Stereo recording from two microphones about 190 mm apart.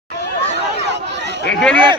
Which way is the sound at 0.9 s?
65° right (ahead or behind).